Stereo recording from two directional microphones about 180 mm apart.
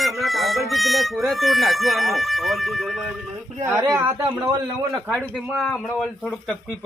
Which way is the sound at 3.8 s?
15° right (ahead or behind).